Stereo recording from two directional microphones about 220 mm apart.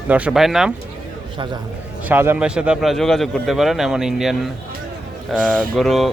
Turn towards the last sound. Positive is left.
turn(degrees=0)  # may be behind; listen again after turning